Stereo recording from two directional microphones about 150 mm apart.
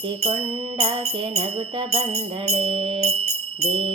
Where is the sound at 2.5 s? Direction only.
35° right (ahead or behind).